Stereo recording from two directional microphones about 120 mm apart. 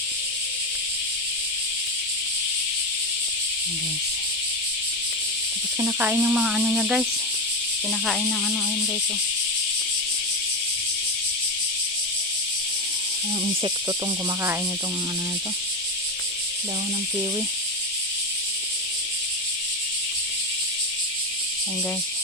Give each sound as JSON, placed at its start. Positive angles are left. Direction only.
{"t": 5.8, "sound": "speech", "side_deg": -15}
{"t": 8.0, "sound": "speech", "side_deg": 0}